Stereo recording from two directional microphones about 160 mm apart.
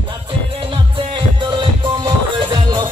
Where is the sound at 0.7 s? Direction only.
30° right (ahead or behind).